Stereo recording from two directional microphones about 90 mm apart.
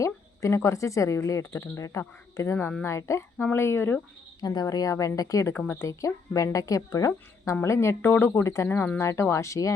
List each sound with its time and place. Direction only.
0.0 s speech: 35° left (ahead or behind)
4.4 s speech: 45° left (ahead or behind)
5.5 s speech: 20° left (ahead or behind)
5.8 s speech: 35° left (ahead or behind)